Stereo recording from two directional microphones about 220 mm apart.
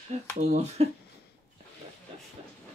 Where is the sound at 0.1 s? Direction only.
30° right (ahead or behind).